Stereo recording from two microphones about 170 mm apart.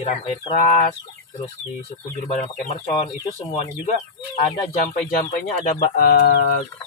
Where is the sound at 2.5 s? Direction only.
35° left (ahead or behind).